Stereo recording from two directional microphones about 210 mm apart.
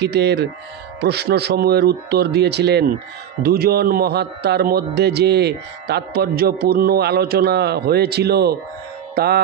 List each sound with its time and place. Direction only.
0.0 s a man's voice: 50° right (ahead or behind)